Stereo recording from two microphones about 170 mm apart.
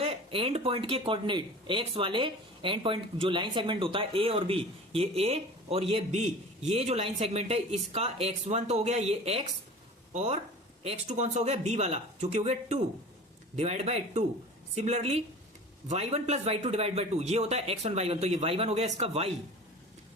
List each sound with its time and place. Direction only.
0.0 s speech: 35° right (ahead or behind)